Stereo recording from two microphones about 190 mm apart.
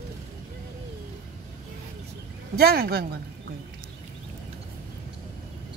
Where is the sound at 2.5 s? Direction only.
55° right (ahead or behind).